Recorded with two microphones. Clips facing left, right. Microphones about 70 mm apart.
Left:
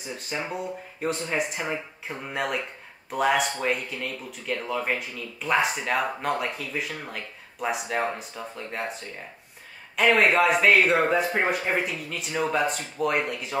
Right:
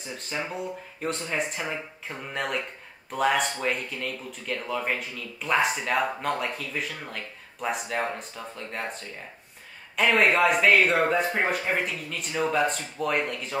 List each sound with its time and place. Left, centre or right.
0.0 s speech: centre